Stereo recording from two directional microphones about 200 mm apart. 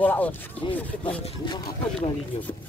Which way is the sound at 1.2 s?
25° left (ahead or behind).